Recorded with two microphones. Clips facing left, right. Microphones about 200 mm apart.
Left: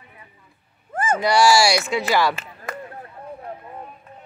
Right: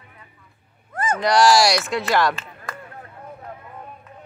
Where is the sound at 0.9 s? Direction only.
30° left (ahead or behind).